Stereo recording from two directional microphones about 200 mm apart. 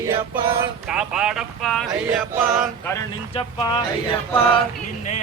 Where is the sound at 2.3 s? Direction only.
10° right (ahead or behind).